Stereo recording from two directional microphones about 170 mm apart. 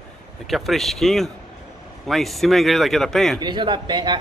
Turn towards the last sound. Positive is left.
turn(degrees=-30)  # may be behind; listen again after turning